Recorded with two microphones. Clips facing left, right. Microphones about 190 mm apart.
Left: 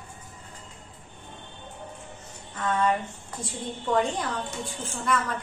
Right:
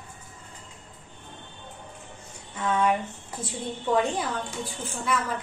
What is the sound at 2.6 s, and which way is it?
A woman's voice, 10° right (ahead or behind).